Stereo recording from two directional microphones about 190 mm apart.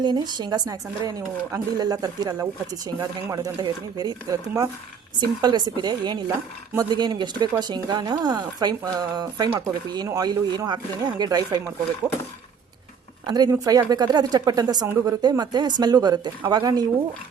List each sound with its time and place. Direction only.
0.0 s speech: 20° right (ahead or behind)
13.2 s speech: 20° right (ahead or behind)